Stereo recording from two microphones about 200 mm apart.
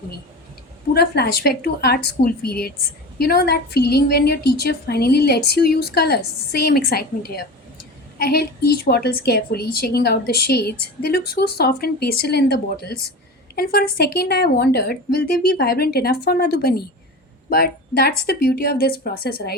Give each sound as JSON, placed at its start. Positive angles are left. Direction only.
{"t": 0.9, "sound": "a woman's voice", "side_deg": 50}